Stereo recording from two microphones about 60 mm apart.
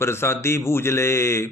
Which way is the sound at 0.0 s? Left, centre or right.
Left.